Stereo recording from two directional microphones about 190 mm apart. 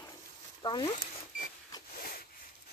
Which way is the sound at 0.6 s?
25° left (ahead or behind).